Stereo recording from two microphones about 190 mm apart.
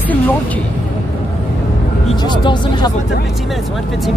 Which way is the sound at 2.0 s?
25° left (ahead or behind).